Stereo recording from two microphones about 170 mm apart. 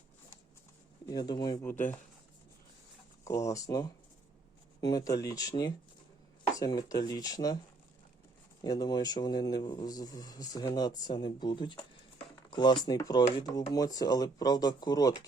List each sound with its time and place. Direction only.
1.0 s a man's voice: 25° left (ahead or behind)
3.2 s a man's voice: 15° left (ahead or behind)
8.6 s a man's voice: 25° left (ahead or behind)